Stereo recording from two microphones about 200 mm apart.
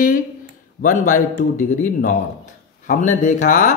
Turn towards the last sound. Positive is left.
turn(degrees=40)  # may be behind; listen again after turning